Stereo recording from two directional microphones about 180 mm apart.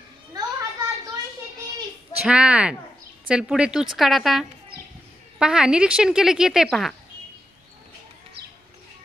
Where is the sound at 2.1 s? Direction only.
5° right (ahead or behind).